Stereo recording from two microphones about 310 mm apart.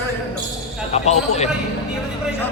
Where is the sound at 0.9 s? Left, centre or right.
Left.